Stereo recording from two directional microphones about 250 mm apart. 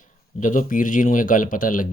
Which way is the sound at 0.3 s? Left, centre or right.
Left.